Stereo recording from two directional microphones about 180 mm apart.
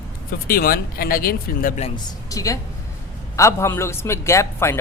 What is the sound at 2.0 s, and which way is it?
A man's voice, 20° left (ahead or behind).